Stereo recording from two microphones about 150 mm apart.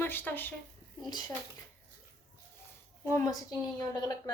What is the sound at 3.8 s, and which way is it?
Speech, 25° left (ahead or behind).